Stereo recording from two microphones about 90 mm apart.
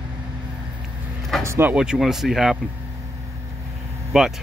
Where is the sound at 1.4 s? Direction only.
30° right (ahead or behind).